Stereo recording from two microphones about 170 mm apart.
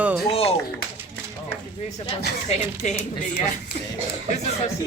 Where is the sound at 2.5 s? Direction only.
45° left (ahead or behind).